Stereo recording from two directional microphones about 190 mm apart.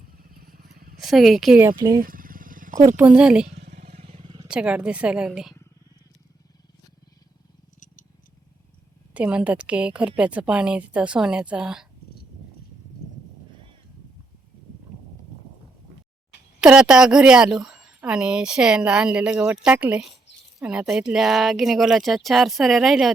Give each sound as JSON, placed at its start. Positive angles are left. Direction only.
{"t": 0.1, "sound": "motorcycle", "side_deg": -50}
{"t": 0.9, "sound": "a woman's voice", "side_deg": 0}
{"t": 1.7, "sound": "speech", "side_deg": -20}
{"t": 2.0, "sound": "vehicle", "side_deg": -45}
{"t": 2.8, "sound": "a woman's voice", "side_deg": -10}
{"t": 3.8, "sound": "vehicle", "side_deg": -35}
{"t": 4.4, "sound": "a woman's voice", "side_deg": -5}
{"t": 9.1, "sound": "a woman's voice", "side_deg": -5}
{"t": 16.6, "sound": "a woman's voice", "side_deg": -5}